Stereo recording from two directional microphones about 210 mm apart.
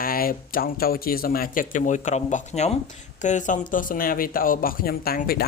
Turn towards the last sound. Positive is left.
turn(degrees=45)  # may be behind; listen again after turning